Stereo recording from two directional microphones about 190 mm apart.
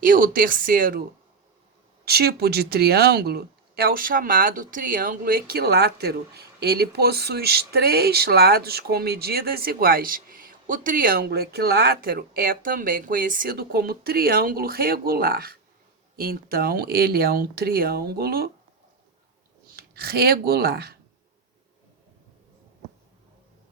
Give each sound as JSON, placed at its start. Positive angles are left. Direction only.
{"t": 0.0, "sound": "speech", "side_deg": -45}
{"t": 2.0, "sound": "speech", "side_deg": -55}
{"t": 19.7, "sound": "speech", "side_deg": -55}